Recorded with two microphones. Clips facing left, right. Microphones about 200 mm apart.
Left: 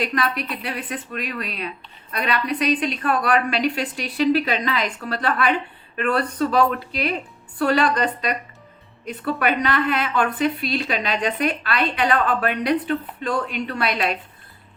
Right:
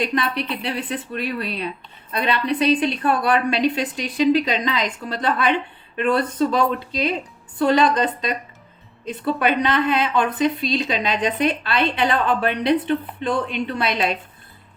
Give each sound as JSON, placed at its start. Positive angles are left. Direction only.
{"t": 0.0, "sound": "a woman's voice", "side_deg": -25}